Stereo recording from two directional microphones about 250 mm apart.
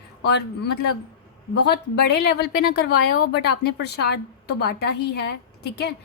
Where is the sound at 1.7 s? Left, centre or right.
Left.